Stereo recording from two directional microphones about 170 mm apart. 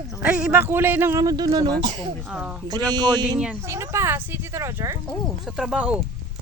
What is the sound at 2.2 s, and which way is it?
Speech, 5° right (ahead or behind).